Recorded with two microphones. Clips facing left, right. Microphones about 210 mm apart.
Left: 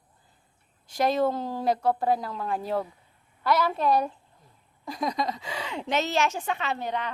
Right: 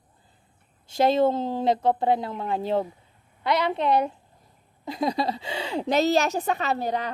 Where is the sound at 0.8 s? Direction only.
25° right (ahead or behind).